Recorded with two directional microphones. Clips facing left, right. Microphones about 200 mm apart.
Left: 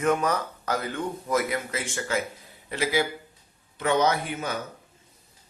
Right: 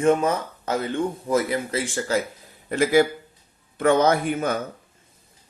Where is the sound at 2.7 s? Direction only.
50° right (ahead or behind).